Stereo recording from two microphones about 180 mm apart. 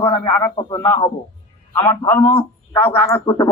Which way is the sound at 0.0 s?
15° left (ahead or behind).